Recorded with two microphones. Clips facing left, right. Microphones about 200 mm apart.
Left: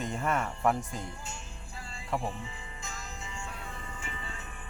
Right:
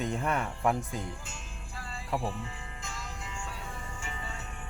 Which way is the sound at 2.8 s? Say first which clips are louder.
Right 1 dB; 90° right.